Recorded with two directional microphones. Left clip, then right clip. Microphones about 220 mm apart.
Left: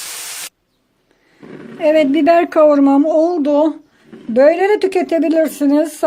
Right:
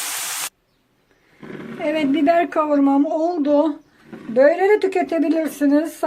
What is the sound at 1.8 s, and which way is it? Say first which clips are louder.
A woman's voice: left 8 dB; 40° left (ahead or behind).